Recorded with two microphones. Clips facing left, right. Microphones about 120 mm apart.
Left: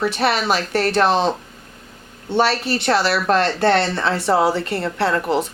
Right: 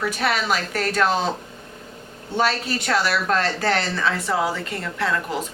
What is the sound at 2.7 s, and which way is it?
A woman's voice, 30° left (ahead or behind).